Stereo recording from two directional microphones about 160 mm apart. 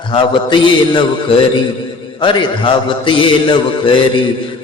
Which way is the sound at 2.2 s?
30° left (ahead or behind).